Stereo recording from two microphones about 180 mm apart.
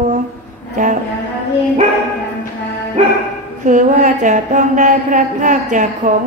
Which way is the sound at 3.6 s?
45° right (ahead or behind).